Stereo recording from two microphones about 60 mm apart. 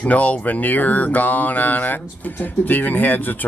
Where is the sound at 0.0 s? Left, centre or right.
Left.